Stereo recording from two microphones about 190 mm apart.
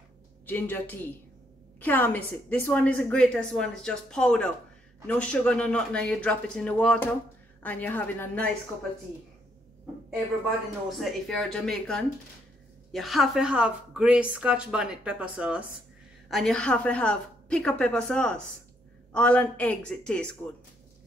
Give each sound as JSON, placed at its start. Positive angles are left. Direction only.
{"t": 0.5, "sound": "a woman's voice", "side_deg": 10}
{"t": 10.9, "sound": "a woman's voice", "side_deg": 0}